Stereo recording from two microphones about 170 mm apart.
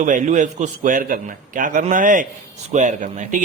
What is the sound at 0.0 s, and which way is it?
A man's voice, 45° right (ahead or behind).